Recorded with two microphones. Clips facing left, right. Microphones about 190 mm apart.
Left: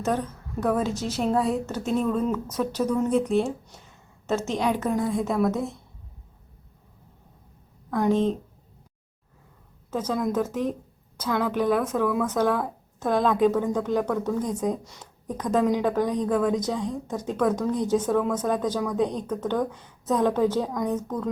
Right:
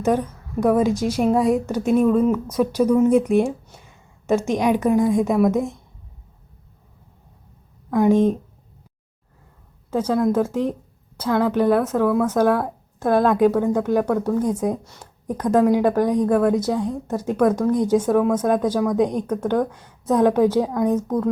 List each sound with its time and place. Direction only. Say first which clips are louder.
0.0 s a woman's voice: right 6 dB; 10° right (ahead or behind)
7.9 s a woman's voice: right 6 dB; 10° right (ahead or behind)
9.9 s a woman's voice: right 6 dB; 10° right (ahead or behind)
11.3 s a woman's voice: right 6 dB; 55° right (ahead or behind)
11.9 s a woman's voice: right 5 dB; 5° right (ahead or behind)